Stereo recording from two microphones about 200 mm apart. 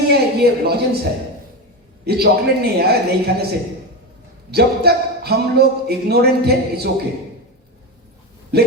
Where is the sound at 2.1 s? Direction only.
50° right (ahead or behind).